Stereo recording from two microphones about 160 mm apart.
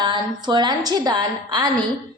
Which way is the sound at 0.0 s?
30° right (ahead or behind).